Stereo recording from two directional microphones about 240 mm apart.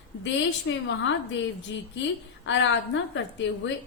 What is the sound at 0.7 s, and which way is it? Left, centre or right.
A woman's voice, left.